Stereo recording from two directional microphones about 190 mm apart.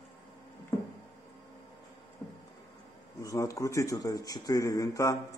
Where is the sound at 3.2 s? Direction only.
15° left (ahead or behind).